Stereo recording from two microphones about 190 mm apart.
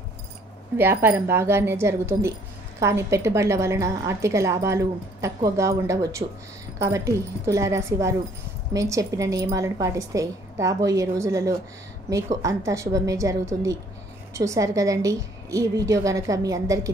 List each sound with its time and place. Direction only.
0.7 s a woman's voice: 10° right (ahead or behind)